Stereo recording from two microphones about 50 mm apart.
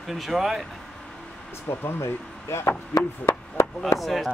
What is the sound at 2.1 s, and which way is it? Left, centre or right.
Speech, left.